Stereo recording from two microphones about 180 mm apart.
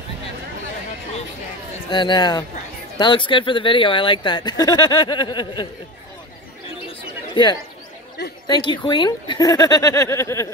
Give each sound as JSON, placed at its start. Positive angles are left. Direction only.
{"t": 1.9, "sound": "speech", "side_deg": 25}
{"t": 6.9, "sound": "chatter", "side_deg": 25}
{"t": 8.5, "sound": "speech", "side_deg": 25}